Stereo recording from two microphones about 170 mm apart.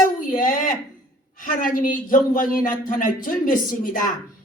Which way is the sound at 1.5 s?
55° left (ahead or behind).